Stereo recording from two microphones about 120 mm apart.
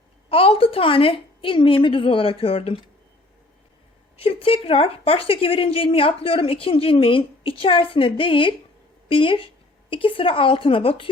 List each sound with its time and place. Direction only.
0.3 s a woman's voice: 50° left (ahead or behind)
4.2 s a woman's voice: 55° left (ahead or behind)